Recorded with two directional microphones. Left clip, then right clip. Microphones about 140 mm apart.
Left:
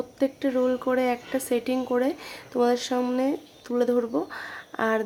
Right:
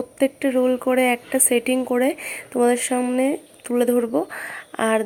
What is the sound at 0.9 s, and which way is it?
Speech, 30° right (ahead or behind).